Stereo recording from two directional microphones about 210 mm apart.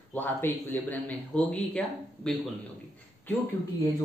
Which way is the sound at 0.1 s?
10° left (ahead or behind).